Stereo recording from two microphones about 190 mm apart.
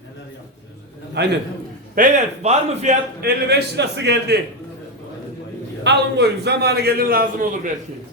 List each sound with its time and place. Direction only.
1.2 s a man's voice: 60° right (ahead or behind)
2.0 s a man's voice: 40° right (ahead or behind); by 4.4 s 65° right (ahead or behind)
5.8 s a man's voice: 65° right (ahead or behind)